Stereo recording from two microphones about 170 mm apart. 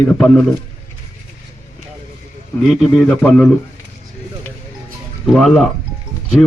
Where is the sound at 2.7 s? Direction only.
5° left (ahead or behind).